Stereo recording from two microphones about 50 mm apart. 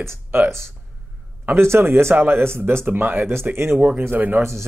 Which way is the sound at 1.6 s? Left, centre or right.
Right.